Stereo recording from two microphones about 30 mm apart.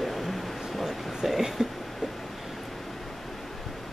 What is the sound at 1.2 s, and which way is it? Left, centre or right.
Speech, centre.